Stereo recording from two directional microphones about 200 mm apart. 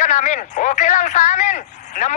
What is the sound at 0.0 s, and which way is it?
Speech, 35° left (ahead or behind).